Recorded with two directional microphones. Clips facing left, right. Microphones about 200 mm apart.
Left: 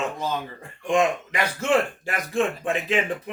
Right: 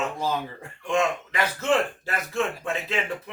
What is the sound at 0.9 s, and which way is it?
Speech, 15° left (ahead or behind).